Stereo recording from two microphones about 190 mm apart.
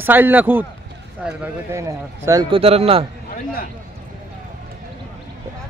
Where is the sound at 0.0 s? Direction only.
10° right (ahead or behind).